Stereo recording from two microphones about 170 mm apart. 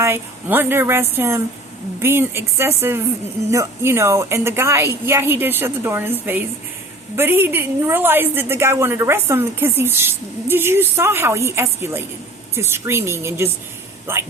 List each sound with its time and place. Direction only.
0.0 s a woman's voice: 15° right (ahead or behind)